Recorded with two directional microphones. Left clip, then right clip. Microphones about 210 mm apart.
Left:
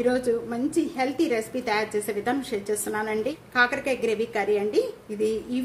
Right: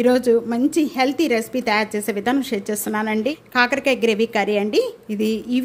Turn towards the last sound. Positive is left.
turn(degrees=-40)  # may be behind; listen again after turning